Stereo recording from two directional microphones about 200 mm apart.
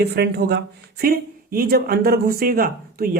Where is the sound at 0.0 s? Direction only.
55° right (ahead or behind).